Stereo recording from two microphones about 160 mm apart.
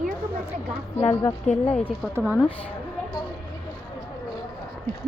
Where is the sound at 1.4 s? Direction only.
45° left (ahead or behind).